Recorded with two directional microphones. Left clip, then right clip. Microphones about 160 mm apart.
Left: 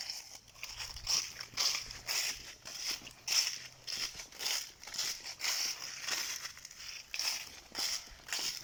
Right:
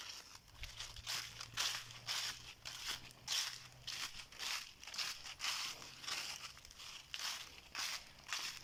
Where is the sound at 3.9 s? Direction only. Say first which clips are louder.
Left 7 dB; 35° left (ahead or behind).